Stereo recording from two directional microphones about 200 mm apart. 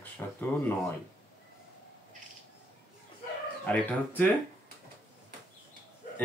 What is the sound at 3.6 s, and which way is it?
Speech, 10° left (ahead or behind).